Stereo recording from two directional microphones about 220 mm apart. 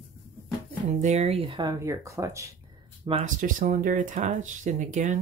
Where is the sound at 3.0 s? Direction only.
25° right (ahead or behind).